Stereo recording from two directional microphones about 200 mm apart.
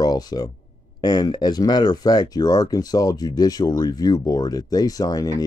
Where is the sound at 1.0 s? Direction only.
20° left (ahead or behind).